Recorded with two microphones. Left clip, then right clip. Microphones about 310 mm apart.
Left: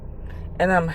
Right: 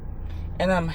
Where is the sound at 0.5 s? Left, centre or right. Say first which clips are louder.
Left 4 dB; centre.